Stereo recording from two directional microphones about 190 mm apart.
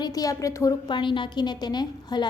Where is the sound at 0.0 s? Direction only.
20° left (ahead or behind).